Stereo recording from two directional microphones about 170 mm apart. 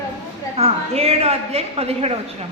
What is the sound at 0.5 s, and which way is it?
A woman's voice, 35° right (ahead or behind).